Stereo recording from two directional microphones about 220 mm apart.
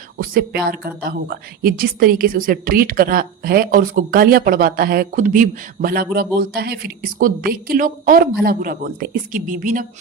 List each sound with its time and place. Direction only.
0.2 s a woman's voice: 40° right (ahead or behind)